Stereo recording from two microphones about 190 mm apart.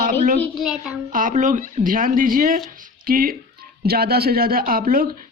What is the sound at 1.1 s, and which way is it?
A woman's voice, 45° right (ahead or behind).